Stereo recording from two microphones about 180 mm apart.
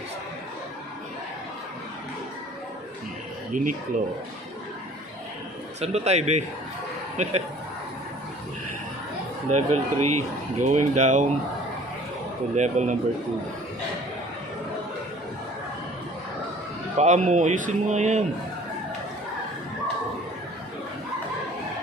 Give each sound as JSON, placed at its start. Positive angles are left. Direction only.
{"t": 3.5, "sound": "speech", "side_deg": -45}
{"t": 5.8, "sound": "speech", "side_deg": -35}
{"t": 9.5, "sound": "speech", "side_deg": -40}
{"t": 12.5, "sound": "speech", "side_deg": -40}
{"t": 17.0, "sound": "speech", "side_deg": -40}